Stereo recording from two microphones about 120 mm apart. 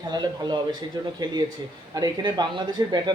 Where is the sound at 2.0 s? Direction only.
35° right (ahead or behind).